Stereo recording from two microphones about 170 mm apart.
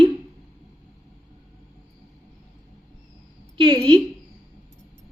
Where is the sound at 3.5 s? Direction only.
30° right (ahead or behind).